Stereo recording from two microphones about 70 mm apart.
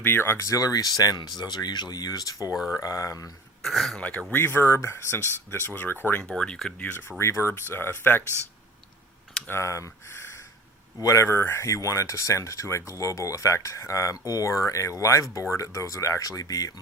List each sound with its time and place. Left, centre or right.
0.0 s speech: left
0.4 s speech: left
1.4 s speech: left
2.6 s speech: centre
2.8 s speech: left
3.6 s speech: centre
4.4 s speech: left
6.2 s speech: centre
6.7 s speech: left
7.2 s speech: left
9.5 s speech: left